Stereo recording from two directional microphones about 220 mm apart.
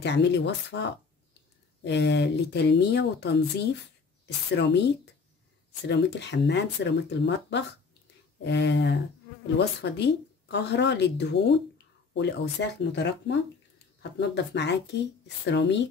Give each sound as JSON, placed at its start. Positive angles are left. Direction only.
{"t": 0.0, "sound": "speech", "side_deg": 50}
{"t": 4.6, "sound": "speech", "side_deg": 50}